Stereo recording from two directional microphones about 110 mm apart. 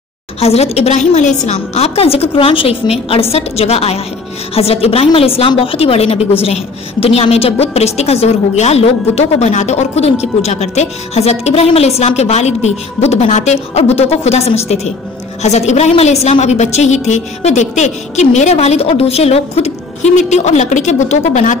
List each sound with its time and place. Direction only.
0.4 s a woman's voice: 70° left (ahead or behind)
15.4 s a woman's voice: 90° left